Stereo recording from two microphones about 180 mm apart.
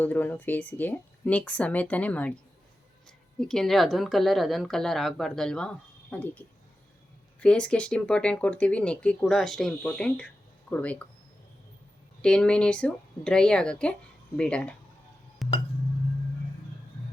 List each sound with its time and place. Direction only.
0.0 s speech: 10° left (ahead or behind)
3.4 s speech: 5° left (ahead or behind)
12.2 s speech: 5° left (ahead or behind)
15.4 s music: centre (ahead or behind)